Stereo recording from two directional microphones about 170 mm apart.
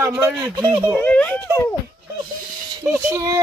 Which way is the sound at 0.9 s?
10° left (ahead or behind).